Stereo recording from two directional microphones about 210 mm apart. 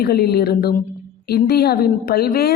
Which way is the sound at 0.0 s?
50° left (ahead or behind).